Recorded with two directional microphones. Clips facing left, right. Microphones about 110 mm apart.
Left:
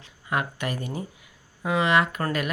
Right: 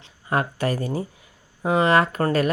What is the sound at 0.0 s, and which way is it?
Speech, 35° right (ahead or behind).